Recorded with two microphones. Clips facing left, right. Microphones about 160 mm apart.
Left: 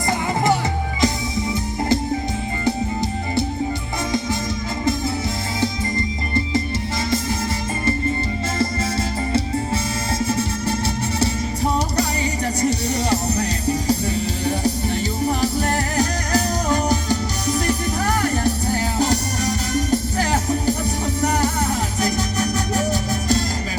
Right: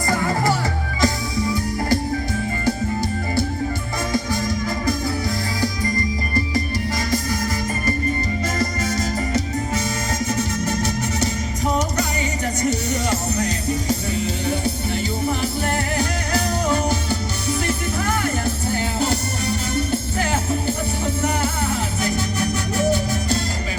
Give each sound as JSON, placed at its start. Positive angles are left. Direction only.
{"t": 1.0, "sound": "music", "side_deg": 20}
{"t": 8.5, "sound": "music", "side_deg": 30}